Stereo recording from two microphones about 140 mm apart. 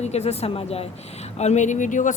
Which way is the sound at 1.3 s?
55° left (ahead or behind).